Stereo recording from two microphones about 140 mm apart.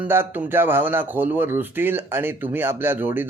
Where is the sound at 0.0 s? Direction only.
15° right (ahead or behind).